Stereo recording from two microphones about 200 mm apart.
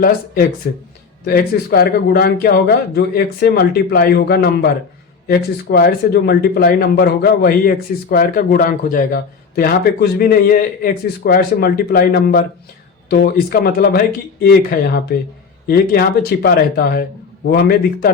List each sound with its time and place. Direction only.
0.7 s speech: 50° left (ahead or behind)
15.1 s speech: 50° left (ahead or behind)